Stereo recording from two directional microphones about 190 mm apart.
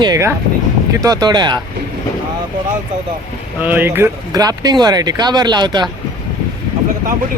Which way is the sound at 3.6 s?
10° right (ahead or behind).